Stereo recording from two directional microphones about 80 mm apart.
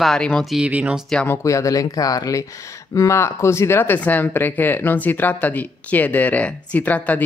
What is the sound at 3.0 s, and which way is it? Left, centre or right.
Speech, left.